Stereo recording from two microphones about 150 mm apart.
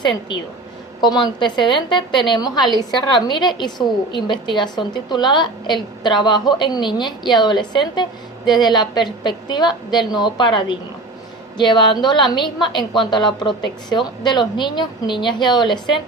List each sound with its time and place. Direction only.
1.0 s a woman's voice: 30° left (ahead or behind)